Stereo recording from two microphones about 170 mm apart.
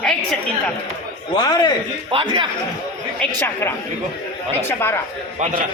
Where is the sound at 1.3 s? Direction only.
25° left (ahead or behind).